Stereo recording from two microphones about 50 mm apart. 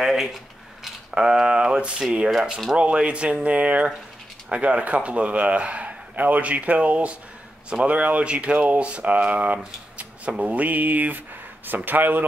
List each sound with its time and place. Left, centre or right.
0.0 s speech: centre; by 12.3 s right